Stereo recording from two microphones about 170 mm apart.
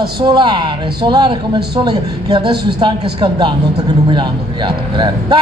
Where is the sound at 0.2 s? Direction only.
25° right (ahead or behind).